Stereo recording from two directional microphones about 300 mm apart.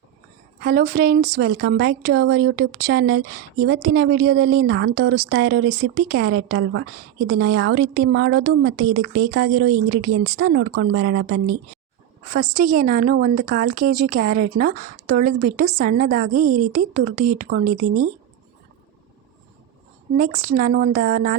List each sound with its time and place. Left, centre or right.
0.6 s a woman's voice: right
12.5 s a woman's voice: right
16.3 s a woman's voice: right
16.7 s a woman's voice: right
20.1 s a woman's voice: right